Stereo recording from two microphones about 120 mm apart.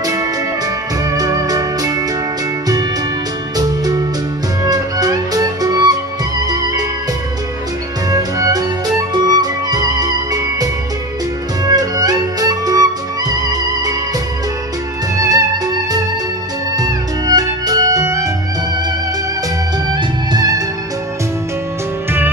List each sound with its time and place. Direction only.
0.0 s music: 30° right (ahead or behind)
3.5 s music: 35° right (ahead or behind)
8.1 s music: 30° right (ahead or behind)
15.1 s music: 30° right (ahead or behind)
19.9 s music: 35° right (ahead or behind)